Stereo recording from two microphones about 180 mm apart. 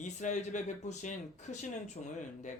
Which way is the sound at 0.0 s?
40° left (ahead or behind).